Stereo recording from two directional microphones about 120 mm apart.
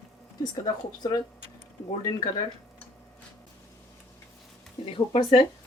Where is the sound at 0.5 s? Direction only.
35° left (ahead or behind).